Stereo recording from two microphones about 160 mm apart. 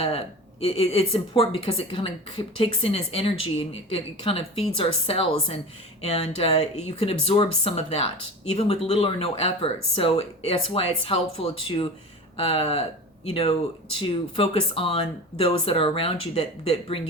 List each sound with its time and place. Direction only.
0.0 s a woman's voice: 35° left (ahead or behind)